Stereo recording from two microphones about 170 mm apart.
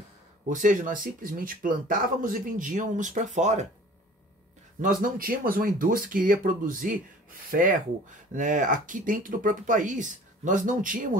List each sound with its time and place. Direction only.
0.5 s speech: 50° right (ahead or behind)
4.8 s speech: 55° right (ahead or behind)
8.3 s speech: 50° right (ahead or behind)